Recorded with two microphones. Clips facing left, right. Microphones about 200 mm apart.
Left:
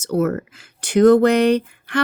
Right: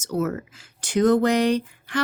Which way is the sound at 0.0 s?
60° left (ahead or behind).